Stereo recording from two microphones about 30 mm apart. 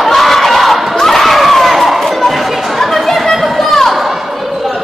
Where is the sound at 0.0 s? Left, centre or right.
Centre.